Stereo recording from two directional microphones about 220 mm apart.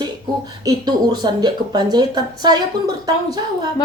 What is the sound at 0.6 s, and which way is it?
A woman's voice, 20° right (ahead or behind).